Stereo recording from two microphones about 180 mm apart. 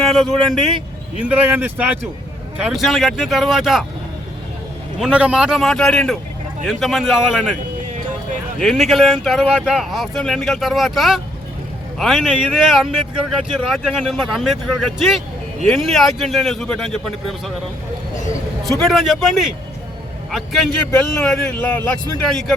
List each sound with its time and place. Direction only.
0.1 s speech: centre (ahead or behind)
1.2 s speech: 10° right (ahead or behind)
4.9 s speech: 5° right (ahead or behind)
7.9 s music: 45° right (ahead or behind)
8.6 s speech: centre (ahead or behind)
18.8 s speech: centre (ahead or behind)